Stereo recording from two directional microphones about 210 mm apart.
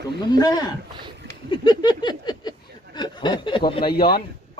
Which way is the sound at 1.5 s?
20° left (ahead or behind).